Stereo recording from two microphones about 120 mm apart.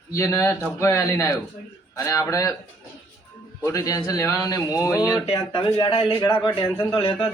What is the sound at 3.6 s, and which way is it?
A man's voice, 25° left (ahead or behind).